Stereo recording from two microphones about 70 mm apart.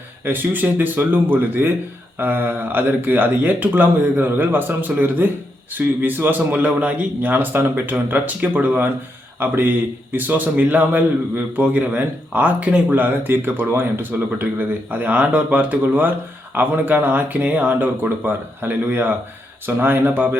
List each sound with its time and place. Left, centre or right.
0.3 s a man's voice: right